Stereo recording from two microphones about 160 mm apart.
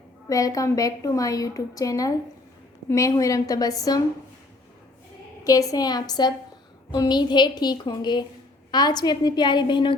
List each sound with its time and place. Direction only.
0.3 s a woman's voice: 20° left (ahead or behind)
5.5 s a woman's voice: 20° left (ahead or behind)